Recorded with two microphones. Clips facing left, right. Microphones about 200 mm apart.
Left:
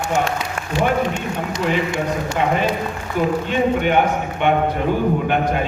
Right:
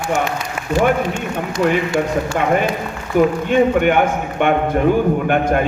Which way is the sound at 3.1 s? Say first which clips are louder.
Right 6 dB; 50° right (ahead or behind).